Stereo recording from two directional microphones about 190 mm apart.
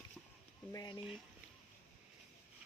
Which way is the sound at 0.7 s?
20° left (ahead or behind).